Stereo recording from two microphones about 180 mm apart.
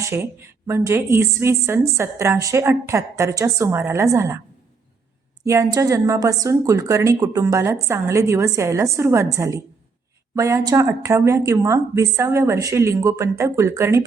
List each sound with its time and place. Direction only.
0.0 s a woman's voice: 15° right (ahead or behind)
5.5 s a woman's voice: 20° right (ahead or behind)